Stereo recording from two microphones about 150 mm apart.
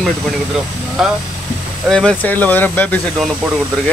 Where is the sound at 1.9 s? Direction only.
5° left (ahead or behind).